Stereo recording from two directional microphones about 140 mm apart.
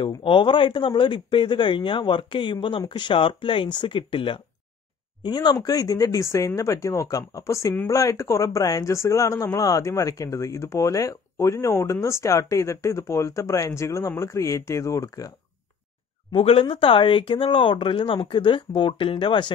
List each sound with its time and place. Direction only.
0.2 s speech: 35° left (ahead or behind)
16.3 s speech: 40° left (ahead or behind)